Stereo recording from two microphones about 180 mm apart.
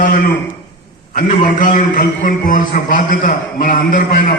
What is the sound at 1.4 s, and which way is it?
A man's voice, 45° left (ahead or behind).